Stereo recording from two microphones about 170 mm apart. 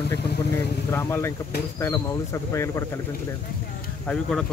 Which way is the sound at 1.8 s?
15° left (ahead or behind).